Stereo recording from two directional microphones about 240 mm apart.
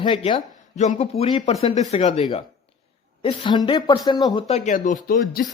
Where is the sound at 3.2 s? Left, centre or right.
Centre; by 5.4 s left.